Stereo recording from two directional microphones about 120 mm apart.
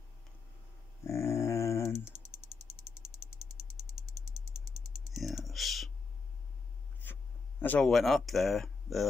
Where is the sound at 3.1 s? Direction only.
60° left (ahead or behind).